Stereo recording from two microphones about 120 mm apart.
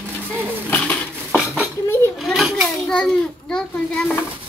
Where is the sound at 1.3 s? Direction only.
Centre (ahead or behind).